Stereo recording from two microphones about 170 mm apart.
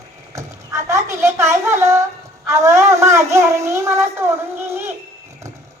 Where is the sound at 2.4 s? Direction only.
15° right (ahead or behind).